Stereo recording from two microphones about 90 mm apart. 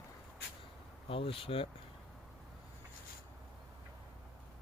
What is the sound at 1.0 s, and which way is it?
Speech, 90° left.